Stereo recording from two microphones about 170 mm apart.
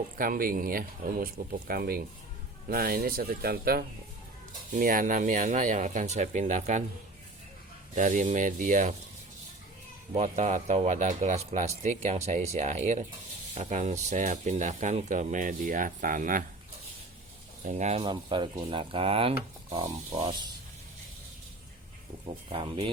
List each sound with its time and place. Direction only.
0.2 s speech: 55° right (ahead or behind)
7.9 s speech: 50° right (ahead or behind)
10.2 s speech: 45° right (ahead or behind)
17.6 s speech: 45° right (ahead or behind)
18.0 s speech: 25° right (ahead or behind)
22.5 s speech: 30° right (ahead or behind)